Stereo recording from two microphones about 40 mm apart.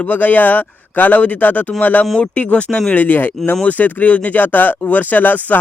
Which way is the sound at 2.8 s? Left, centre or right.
Left.